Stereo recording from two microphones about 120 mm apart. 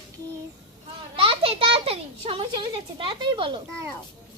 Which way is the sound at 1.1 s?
50° right (ahead or behind).